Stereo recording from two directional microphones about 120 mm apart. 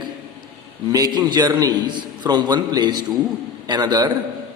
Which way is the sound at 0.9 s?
35° right (ahead or behind).